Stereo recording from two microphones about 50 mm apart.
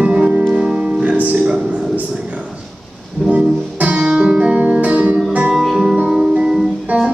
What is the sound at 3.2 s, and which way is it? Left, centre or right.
Music, right.